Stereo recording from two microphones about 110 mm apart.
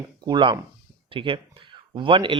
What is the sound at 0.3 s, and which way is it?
Speech, 45° right (ahead or behind).